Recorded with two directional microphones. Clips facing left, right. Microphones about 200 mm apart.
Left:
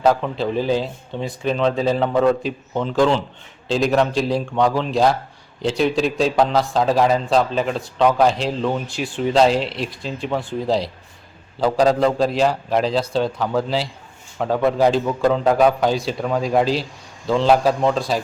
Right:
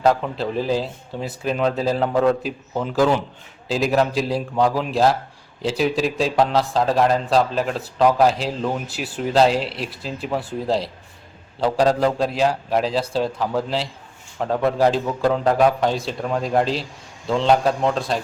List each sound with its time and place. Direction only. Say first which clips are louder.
0.0 s a man's voice: left 1 dB; centre (ahead or behind)